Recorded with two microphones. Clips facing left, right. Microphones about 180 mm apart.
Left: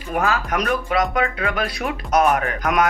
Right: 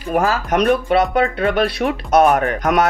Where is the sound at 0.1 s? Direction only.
35° right (ahead or behind).